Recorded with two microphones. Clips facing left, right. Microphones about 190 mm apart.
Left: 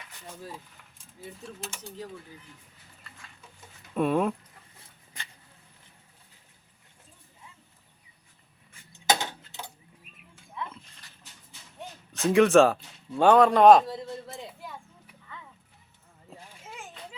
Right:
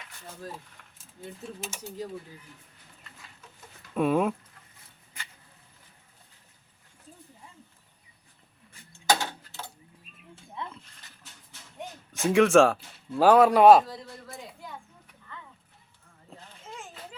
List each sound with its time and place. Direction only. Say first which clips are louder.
1.2 s speech: right 1 dB; 5° left (ahead or behind)
1.6 s speech: right 3 dB; 20° right (ahead or behind)
3.9 s speech: right 1 dB; centre (ahead or behind)
8.9 s a sound: right 1 dB; 20° left (ahead or behind)
12.1 s speech: left 1 dB; centre (ahead or behind)
13.8 s a sound: left 5 dB; 25° left (ahead or behind)